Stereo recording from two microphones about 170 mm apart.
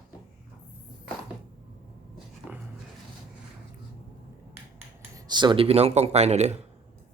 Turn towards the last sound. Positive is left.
turn(degrees=-40)  # may be behind; listen again after turning